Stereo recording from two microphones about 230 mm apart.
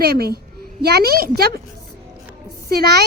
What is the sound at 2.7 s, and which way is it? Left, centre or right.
Speech, right.